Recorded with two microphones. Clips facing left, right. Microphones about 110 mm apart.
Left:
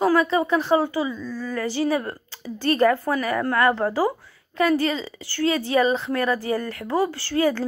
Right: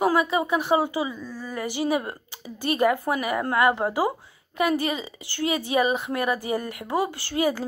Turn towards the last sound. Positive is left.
turn(degrees=-15)  # may be behind; listen again after turning